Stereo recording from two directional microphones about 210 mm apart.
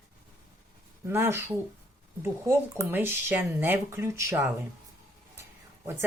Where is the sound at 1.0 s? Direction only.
10° right (ahead or behind).